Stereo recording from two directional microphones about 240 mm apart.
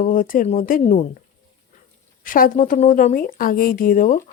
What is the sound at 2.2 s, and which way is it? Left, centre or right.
Speech, left.